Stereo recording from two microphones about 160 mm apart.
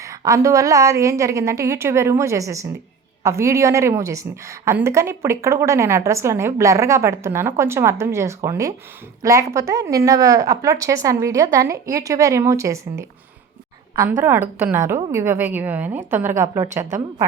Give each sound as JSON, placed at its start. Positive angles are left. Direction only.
{"t": 0.0, "sound": "a woman's voice", "side_deg": -20}